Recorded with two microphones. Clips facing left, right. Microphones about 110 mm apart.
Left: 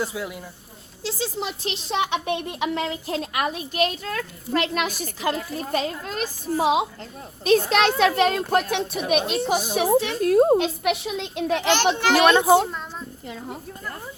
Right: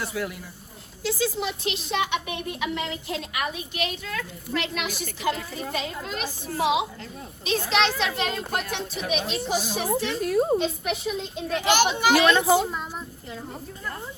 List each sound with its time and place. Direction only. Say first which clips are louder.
0.0 s speech: left 2 dB; 15° left (ahead or behind)
1.0 s a woman's voice: right 2 dB; 30° left (ahead or behind); by 11.5 s 90° left
11.7 s a child's voice: right 1 dB; 10° right (ahead or behind)
12.3 s a child's voice: left 3 dB; 20° left (ahead or behind)